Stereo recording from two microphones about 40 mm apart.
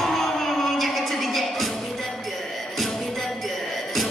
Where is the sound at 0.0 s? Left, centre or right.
Centre.